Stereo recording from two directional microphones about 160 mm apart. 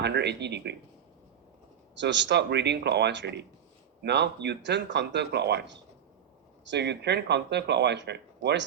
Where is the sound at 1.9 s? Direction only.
90° right.